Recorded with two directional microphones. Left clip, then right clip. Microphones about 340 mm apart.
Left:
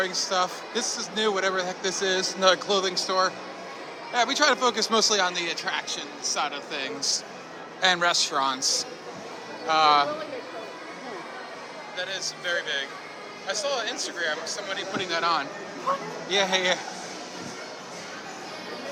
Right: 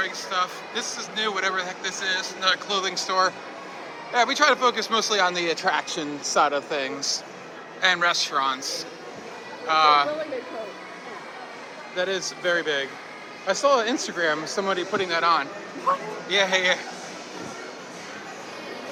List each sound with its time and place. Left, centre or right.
0.0 s speech: centre
11.9 s speech: centre
14.9 s speech: centre